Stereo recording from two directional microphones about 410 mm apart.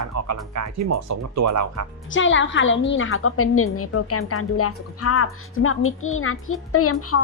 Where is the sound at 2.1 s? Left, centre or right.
Left.